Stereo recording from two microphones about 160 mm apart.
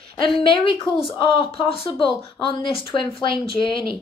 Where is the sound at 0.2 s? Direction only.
35° left (ahead or behind).